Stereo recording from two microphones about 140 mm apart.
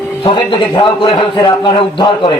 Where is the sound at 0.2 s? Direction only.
35° left (ahead or behind).